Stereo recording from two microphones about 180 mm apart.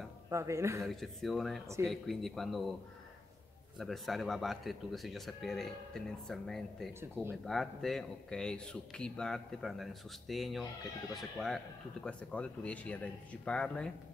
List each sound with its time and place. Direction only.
0.3 s speech: 15° right (ahead or behind)
0.8 s speech: centre (ahead or behind)
3.7 s speech: centre (ahead or behind)